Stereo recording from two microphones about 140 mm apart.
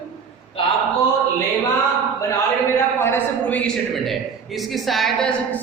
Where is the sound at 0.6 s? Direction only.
40° left (ahead or behind).